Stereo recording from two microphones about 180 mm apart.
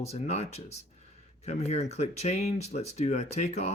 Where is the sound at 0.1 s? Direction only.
35° left (ahead or behind).